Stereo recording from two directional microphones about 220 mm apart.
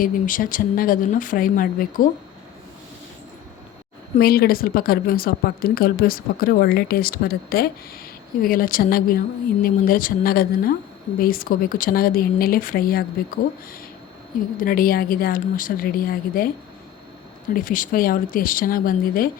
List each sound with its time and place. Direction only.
0.0 s speech: 40° left (ahead or behind)
4.2 s a woman's voice: 45° left (ahead or behind)
14.6 s speech: 40° left (ahead or behind)
17.5 s speech: 40° left (ahead or behind)